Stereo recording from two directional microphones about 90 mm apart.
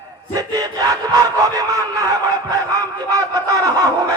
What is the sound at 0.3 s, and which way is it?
Battle cry, 40° right (ahead or behind).